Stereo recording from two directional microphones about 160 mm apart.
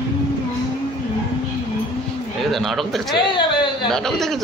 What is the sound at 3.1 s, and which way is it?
Speech, 30° left (ahead or behind).